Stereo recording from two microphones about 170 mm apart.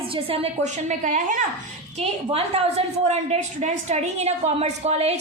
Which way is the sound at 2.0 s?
35° right (ahead or behind).